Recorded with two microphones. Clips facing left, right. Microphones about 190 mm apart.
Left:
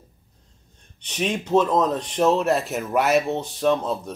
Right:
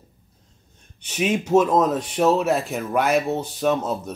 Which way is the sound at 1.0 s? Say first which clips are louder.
Right 3 dB; 5° right (ahead or behind).